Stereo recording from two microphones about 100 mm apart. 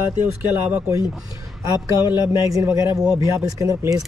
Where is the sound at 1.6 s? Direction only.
30° right (ahead or behind).